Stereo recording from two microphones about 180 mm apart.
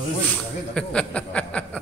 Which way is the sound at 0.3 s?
5° left (ahead or behind).